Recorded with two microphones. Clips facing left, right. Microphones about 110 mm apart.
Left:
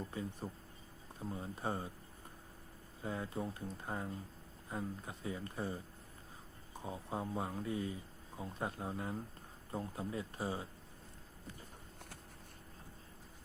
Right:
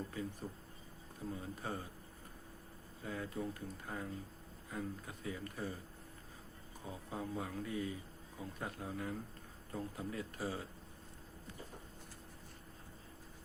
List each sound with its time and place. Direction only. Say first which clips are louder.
0.4 s speech: left 1 dB; 30° left (ahead or behind)
3.0 s speech: left 1 dB; 30° left (ahead or behind)
6.8 s speech: left 3 dB; 25° left (ahead or behind)